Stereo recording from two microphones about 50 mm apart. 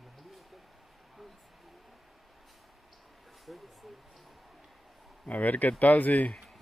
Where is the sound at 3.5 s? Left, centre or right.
Centre.